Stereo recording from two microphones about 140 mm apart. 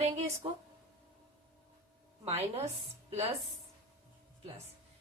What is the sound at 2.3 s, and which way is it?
Speech, 50° right (ahead or behind).